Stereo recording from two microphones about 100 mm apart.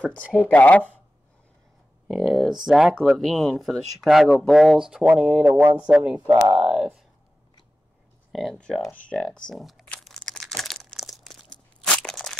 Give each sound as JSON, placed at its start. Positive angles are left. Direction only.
{"t": 0.0, "sound": "speech", "side_deg": 15}
{"t": 2.1, "sound": "speech", "side_deg": 0}
{"t": 6.2, "sound": "speech", "side_deg": -40}
{"t": 6.5, "sound": "speech", "side_deg": -10}
{"t": 8.3, "sound": "speech", "side_deg": 0}
{"t": 10.0, "sound": "crumpling", "side_deg": 5}